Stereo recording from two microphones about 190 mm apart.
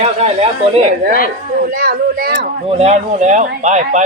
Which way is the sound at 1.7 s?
50° right (ahead or behind).